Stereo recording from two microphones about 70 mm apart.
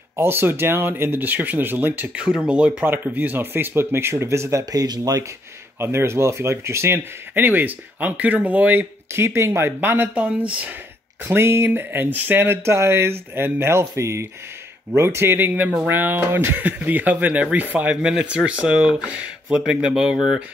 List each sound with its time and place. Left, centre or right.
0.1 s speech: right
2.2 s speech: centre
2.9 s speech: right
4.8 s speech: right
5.8 s speech: right
9.1 s speech: right
10.1 s speech: centre
11.2 s speech: right; by 20.4 s centre